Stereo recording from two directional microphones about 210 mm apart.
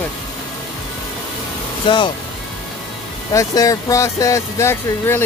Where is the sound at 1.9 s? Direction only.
25° left (ahead or behind).